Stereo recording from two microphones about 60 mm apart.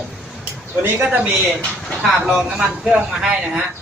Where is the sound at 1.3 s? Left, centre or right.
Centre.